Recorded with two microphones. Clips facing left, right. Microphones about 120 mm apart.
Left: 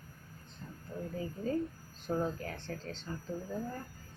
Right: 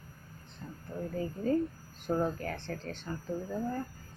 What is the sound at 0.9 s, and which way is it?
Speech, 60° right (ahead or behind).